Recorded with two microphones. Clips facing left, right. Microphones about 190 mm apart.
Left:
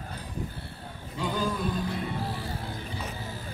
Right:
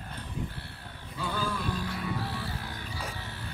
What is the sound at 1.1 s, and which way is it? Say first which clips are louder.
Music: left 3 dB; 15° left (ahead or behind).